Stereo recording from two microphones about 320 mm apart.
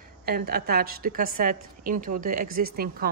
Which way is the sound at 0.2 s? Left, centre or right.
Right.